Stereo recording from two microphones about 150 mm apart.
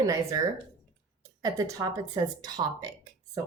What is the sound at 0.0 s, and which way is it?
Speech, 20° right (ahead or behind).